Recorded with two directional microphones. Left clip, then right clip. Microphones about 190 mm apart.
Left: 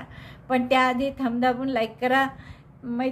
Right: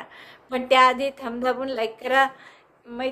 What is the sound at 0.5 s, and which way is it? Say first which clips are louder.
A woman's voice: right 4 dB; 10° right (ahead or behind).